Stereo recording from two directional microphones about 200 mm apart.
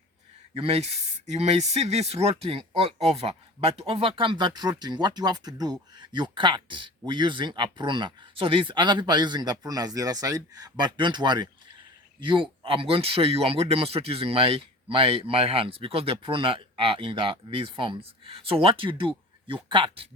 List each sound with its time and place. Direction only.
0.5 s speech: 30° right (ahead or behind)